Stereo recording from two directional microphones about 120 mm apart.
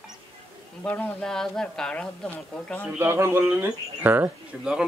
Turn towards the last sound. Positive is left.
turn(degrees=-15)  # may be behind; listen again after turning